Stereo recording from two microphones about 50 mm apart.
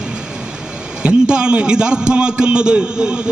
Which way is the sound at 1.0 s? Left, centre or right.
Centre.